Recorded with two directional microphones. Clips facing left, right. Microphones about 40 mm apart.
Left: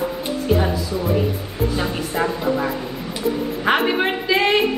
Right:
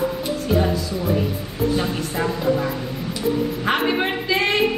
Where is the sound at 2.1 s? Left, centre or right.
Centre.